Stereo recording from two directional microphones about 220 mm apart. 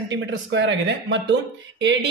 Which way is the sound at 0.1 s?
55° right (ahead or behind).